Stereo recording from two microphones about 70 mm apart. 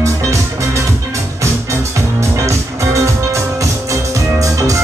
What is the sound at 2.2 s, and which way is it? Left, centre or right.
Music, right.